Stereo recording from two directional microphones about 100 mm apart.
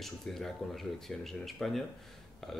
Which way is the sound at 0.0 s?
5° left (ahead or behind).